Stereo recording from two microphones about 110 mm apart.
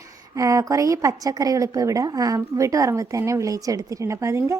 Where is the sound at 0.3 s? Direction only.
30° right (ahead or behind).